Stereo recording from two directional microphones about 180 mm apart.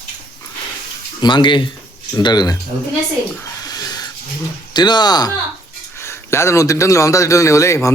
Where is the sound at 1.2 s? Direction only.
25° left (ahead or behind).